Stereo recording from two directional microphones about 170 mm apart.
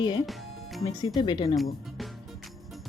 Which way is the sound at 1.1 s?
25° left (ahead or behind).